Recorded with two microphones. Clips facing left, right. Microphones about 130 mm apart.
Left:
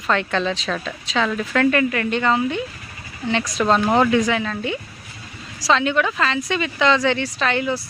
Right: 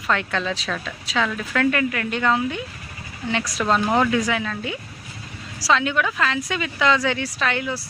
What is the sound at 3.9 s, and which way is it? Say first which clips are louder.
Speech: left 3 dB; centre (ahead or behind).